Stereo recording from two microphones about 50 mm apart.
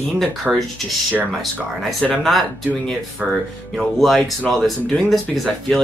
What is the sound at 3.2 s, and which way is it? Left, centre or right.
Speech, right.